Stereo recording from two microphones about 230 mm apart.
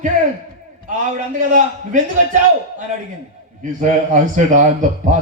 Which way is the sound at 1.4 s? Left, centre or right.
Right.